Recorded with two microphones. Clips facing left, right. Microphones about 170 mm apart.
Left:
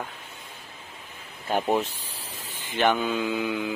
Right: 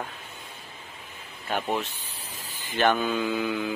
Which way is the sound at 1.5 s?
25° left (ahead or behind).